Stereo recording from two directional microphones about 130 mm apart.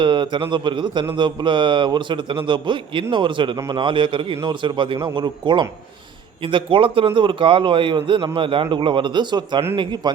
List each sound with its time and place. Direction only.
0.0 s a man's voice: 40° right (ahead or behind)